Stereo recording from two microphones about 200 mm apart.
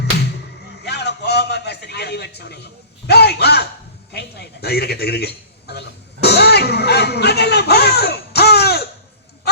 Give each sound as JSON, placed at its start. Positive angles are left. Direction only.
{"t": 0.8, "sound": "a sound", "side_deg": 55}
{"t": 3.1, "sound": "a man's voice", "side_deg": 55}
{"t": 6.2, "sound": "music", "side_deg": 55}